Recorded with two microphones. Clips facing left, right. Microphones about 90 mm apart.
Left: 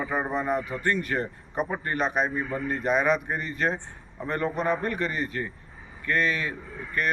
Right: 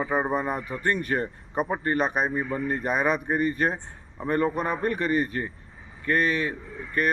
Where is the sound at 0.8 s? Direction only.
35° right (ahead or behind).